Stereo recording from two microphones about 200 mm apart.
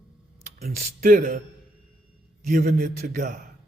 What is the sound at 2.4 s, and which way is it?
Speech, 40° right (ahead or behind).